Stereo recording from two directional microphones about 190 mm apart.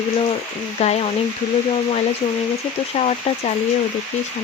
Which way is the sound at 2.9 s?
35° left (ahead or behind).